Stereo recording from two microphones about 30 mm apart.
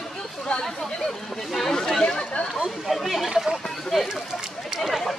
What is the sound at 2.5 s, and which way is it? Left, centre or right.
Speech, centre.